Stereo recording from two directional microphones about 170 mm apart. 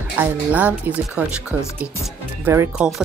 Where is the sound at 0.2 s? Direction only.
10° right (ahead or behind).